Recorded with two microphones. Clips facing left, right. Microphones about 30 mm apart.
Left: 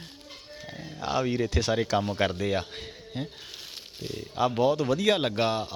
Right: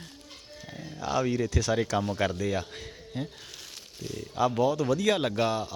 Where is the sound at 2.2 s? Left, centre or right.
Left.